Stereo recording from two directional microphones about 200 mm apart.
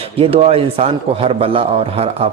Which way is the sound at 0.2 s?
30° right (ahead or behind).